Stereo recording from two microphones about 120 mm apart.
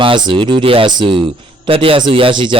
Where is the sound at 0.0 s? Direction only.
45° right (ahead or behind).